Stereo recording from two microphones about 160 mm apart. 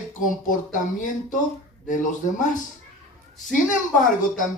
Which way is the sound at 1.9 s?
55° left (ahead or behind).